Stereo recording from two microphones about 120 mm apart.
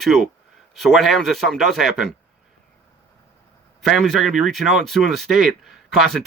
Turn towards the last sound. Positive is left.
turn(degrees=0)  # may be behind; listen again after turning